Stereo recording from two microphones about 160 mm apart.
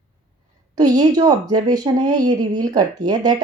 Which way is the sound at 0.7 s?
25° right (ahead or behind).